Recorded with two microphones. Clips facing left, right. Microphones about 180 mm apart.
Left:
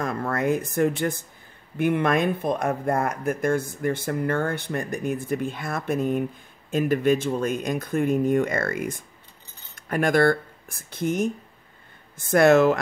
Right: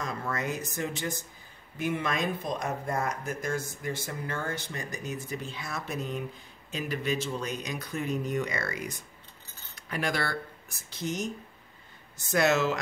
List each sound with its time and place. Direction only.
0.0 s speech: 55° left (ahead or behind)